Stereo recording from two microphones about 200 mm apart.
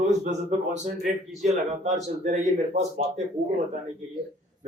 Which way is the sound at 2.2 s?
35° right (ahead or behind).